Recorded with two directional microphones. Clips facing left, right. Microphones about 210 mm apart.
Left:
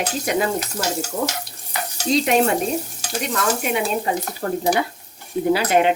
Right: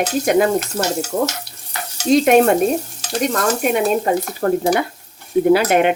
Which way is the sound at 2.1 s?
55° right (ahead or behind).